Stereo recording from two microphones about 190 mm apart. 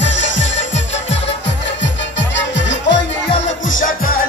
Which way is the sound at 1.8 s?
70° left (ahead or behind).